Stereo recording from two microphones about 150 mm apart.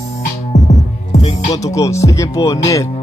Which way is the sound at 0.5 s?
50° left (ahead or behind).